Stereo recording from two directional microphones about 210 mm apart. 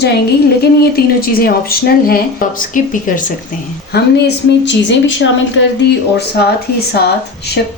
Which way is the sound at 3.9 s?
50° left (ahead or behind).